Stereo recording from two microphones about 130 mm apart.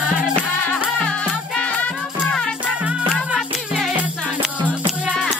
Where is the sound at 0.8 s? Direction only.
10° left (ahead or behind).